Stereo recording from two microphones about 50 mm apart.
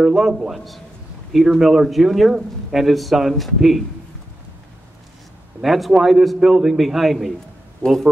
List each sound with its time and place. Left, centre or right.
0.0 s a man's voice: centre
5.6 s a man's voice: centre
7.8 s a man's voice: centre